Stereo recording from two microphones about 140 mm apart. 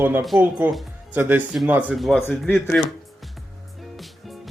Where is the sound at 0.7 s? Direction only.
Centre (ahead or behind).